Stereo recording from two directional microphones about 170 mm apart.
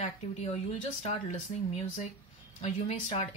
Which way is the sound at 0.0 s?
40° left (ahead or behind).